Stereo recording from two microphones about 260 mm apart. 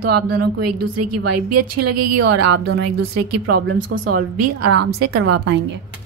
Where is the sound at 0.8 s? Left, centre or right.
Right.